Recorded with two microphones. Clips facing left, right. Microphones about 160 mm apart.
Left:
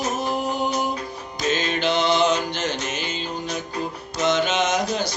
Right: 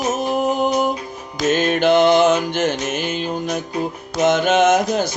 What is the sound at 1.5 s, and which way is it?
Mantra, 55° right (ahead or behind).